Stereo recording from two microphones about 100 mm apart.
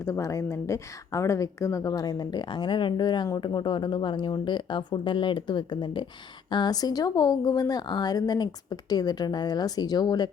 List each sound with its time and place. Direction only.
0.0 s a woman's voice: 30° left (ahead or behind)